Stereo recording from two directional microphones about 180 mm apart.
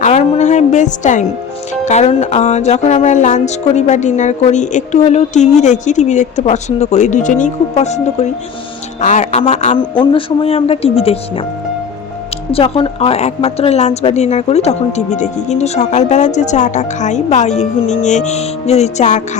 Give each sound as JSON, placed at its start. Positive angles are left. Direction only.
{"t": 0.0, "sound": "a woman's voice", "side_deg": 40}
{"t": 1.8, "sound": "music", "side_deg": 40}
{"t": 10.0, "sound": "music", "side_deg": 30}
{"t": 12.5, "sound": "music", "side_deg": 30}